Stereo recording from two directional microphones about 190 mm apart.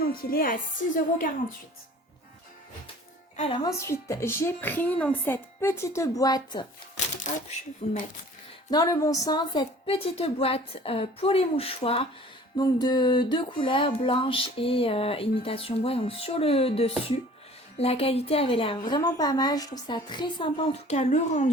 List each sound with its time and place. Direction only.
0.0 s a woman's voice: 50° left (ahead or behind)
3.6 s a woman's voice: 15° left (ahead or behind)
7.8 s speech: 35° left (ahead or behind)
8.7 s speech: 20° left (ahead or behind); by 21.5 s 40° left (ahead or behind)